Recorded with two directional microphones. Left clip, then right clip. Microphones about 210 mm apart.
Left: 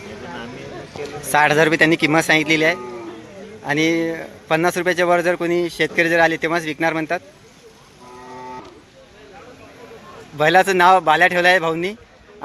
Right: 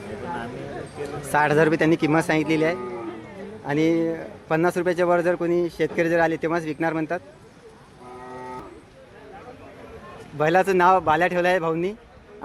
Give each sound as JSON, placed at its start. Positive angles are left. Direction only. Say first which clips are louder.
{"t": 1.3, "sound": "a man's voice", "louder": "left 4 dB", "side_deg": 0}
{"t": 10.3, "sound": "a man's voice", "louder": "left 5 dB", "side_deg": 0}